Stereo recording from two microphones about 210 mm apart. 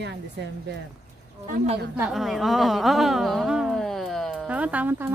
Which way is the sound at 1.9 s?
5° right (ahead or behind).